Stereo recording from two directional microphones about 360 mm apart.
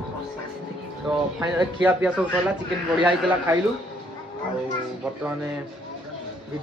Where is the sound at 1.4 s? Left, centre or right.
Centre.